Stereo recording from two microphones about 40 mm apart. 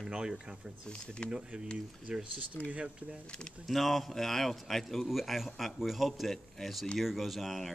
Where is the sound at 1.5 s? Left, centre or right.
Right.